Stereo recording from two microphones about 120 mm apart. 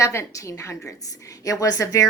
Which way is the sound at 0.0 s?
25° left (ahead or behind).